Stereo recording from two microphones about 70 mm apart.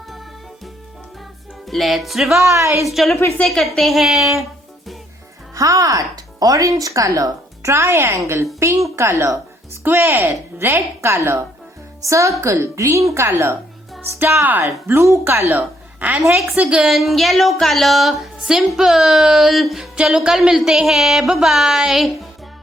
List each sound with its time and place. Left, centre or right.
1.6 s speech: centre
2.4 s speech: right
2.8 s speech: centre
5.5 s speech: right
9.8 s a woman's voice: right
14.4 s a woman's voice: right
16.0 s a woman's voice: right
16.8 s speech: centre